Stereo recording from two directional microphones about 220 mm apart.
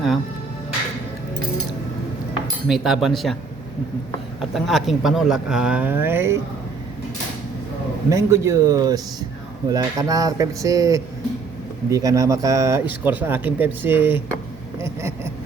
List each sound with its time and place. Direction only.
2.6 s speech: centre (ahead or behind)
4.4 s speech: centre (ahead or behind)
8.1 s speech: 15° right (ahead or behind)